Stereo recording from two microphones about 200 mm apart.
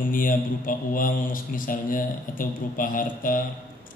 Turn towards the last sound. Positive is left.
turn(degrees=45)  # may be behind; listen again after turning